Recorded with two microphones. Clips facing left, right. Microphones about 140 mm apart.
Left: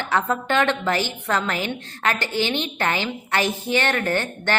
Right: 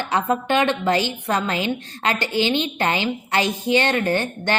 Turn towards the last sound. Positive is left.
turn(degrees=-15)  # may be behind; listen again after turning